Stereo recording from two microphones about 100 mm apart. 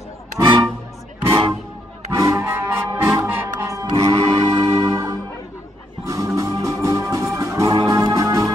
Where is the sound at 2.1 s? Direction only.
30° right (ahead or behind).